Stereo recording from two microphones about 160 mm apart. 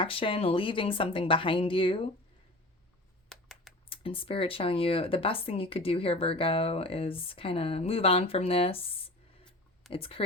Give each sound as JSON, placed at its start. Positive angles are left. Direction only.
{"t": 0.0, "sound": "speech", "side_deg": 35}
{"t": 3.2, "sound": "typing", "side_deg": 0}
{"t": 3.8, "sound": "speech", "side_deg": 35}